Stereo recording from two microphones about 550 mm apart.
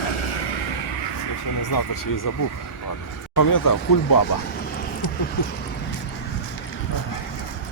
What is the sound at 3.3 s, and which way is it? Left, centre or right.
Speech, left.